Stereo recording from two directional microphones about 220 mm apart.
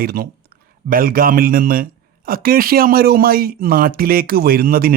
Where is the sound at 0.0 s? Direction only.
45° right (ahead or behind).